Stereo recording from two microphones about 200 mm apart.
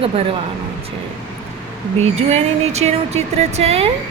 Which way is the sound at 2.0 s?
35° right (ahead or behind).